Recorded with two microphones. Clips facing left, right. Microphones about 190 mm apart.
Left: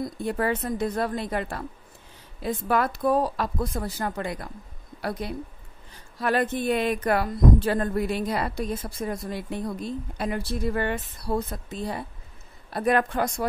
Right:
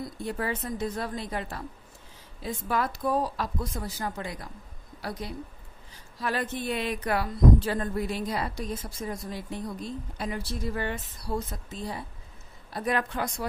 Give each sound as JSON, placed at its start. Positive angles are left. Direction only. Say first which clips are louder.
{"t": 0.2, "sound": "a woman's voice", "louder": "left 5 dB", "side_deg": 55}